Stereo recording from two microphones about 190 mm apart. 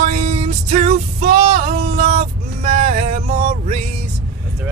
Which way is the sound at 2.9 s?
35° right (ahead or behind).